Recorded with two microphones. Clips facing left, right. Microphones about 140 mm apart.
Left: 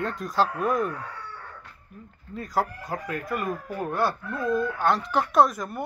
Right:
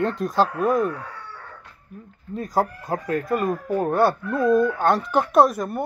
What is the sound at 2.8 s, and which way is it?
Speech, 35° right (ahead or behind).